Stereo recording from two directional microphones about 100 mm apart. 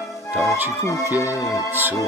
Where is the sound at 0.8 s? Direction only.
30° left (ahead or behind).